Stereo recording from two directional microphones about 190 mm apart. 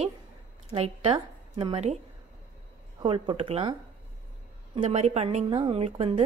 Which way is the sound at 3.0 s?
25° right (ahead or behind).